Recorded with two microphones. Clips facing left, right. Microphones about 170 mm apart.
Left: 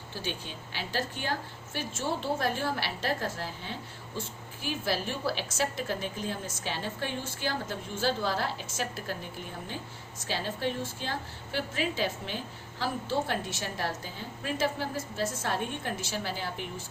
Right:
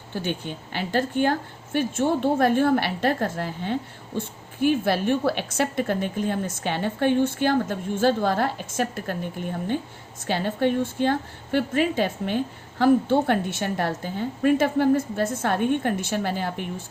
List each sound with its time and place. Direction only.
0.1 s speech: 55° right (ahead or behind)
10.2 s speech: 60° right (ahead or behind)